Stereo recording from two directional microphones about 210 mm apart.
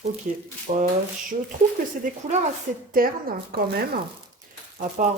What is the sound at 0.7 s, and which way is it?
Speech, 35° right (ahead or behind).